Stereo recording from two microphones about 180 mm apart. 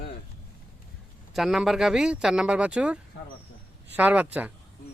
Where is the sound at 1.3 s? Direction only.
Centre (ahead or behind).